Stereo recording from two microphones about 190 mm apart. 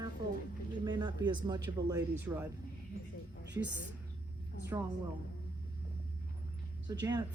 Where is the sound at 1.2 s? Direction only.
25° right (ahead or behind).